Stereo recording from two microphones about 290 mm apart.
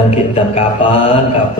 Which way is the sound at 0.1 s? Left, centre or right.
Left.